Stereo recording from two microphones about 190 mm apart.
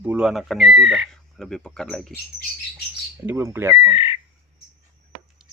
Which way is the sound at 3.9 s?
30° left (ahead or behind).